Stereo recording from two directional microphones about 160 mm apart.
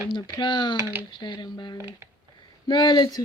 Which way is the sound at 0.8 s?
15° right (ahead or behind).